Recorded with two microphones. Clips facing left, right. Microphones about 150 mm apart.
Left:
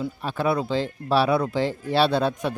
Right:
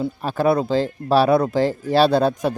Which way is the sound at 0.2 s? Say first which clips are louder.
Right 6 dB; 40° right (ahead or behind).